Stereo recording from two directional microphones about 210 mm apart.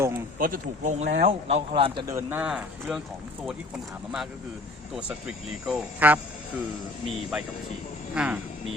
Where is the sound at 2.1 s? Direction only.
5° right (ahead or behind).